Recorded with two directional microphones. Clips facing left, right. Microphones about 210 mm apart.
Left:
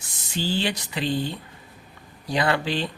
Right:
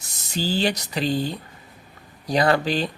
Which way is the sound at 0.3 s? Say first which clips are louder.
Right 3 dB; 40° right (ahead or behind).